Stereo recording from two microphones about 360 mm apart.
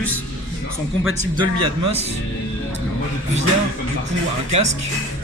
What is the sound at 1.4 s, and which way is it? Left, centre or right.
Speech, centre.